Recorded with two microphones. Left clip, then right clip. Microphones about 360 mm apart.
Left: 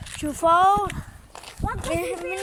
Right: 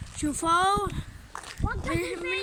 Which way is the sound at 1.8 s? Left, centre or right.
Left.